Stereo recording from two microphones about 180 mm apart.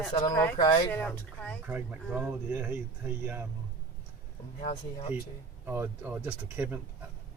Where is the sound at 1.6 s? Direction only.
5° right (ahead or behind).